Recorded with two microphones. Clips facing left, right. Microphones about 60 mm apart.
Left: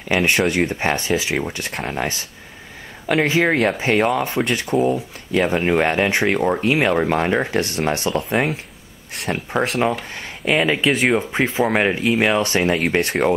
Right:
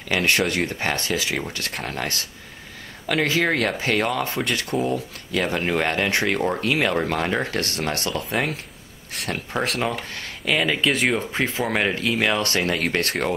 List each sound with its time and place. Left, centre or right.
0.1 s speech: centre
8.1 s speech: centre
10.1 s speech: left